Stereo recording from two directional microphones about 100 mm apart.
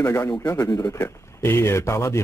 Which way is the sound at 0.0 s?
25° left (ahead or behind).